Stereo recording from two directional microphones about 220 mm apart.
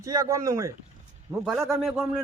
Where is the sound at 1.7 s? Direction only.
Centre (ahead or behind).